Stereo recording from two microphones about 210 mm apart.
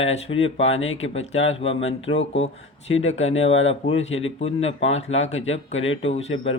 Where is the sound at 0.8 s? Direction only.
65° left (ahead or behind).